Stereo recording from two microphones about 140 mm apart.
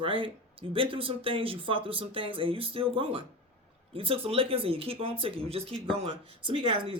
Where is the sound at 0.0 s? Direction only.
40° right (ahead or behind).